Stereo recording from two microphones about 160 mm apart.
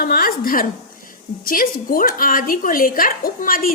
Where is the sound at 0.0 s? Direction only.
65° left (ahead or behind).